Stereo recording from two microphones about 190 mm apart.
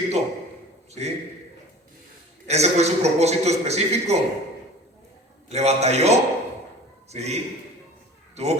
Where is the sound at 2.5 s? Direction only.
35° right (ahead or behind).